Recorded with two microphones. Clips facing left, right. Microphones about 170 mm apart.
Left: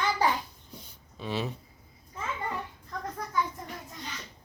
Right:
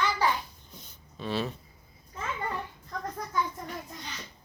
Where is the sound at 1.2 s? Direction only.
15° left (ahead or behind).